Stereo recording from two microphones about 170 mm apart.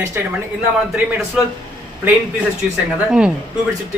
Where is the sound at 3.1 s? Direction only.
5° right (ahead or behind).